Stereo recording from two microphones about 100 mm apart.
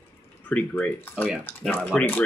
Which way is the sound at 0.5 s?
15° left (ahead or behind).